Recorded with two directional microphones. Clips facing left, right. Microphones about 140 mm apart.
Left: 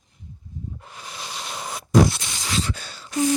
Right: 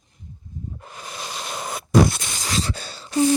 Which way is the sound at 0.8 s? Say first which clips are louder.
Right 2 dB; 45° right (ahead or behind).